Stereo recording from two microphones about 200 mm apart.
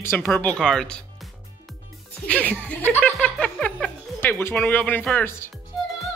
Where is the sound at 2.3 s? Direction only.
5° left (ahead or behind).